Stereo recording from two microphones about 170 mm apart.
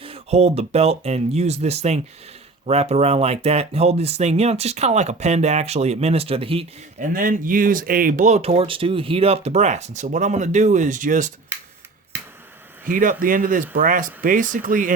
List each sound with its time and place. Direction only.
0.0 s speech: 35° right (ahead or behind)
7.0 s speech: 55° right (ahead or behind)
12.9 s speech: 55° right (ahead or behind)